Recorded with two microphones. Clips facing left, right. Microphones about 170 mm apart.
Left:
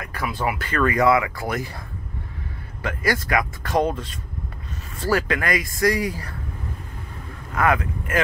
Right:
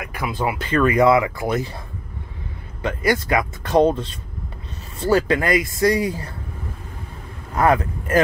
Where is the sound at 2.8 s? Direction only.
25° right (ahead or behind).